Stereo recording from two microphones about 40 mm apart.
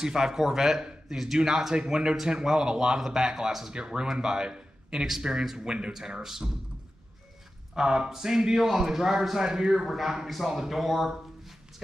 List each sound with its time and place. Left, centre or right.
0.0 s a man's voice: centre
3.7 s a man's voice: right
7.7 s a man's voice: centre
9.8 s speech: centre
10.5 s a man's voice: centre